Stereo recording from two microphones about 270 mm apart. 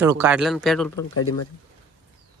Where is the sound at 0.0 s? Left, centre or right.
Centre.